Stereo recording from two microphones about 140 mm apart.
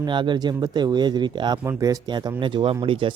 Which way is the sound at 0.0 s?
35° right (ahead or behind).